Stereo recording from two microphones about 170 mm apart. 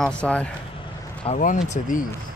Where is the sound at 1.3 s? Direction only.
50° left (ahead or behind).